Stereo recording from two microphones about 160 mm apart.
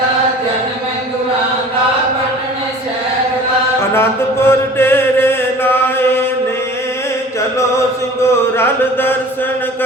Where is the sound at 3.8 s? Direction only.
15° left (ahead or behind).